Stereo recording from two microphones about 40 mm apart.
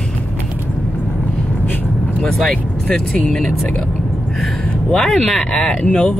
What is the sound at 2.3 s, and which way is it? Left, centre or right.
Speech, centre.